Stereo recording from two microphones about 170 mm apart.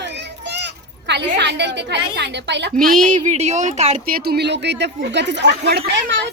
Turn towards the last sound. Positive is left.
turn(degrees=-80)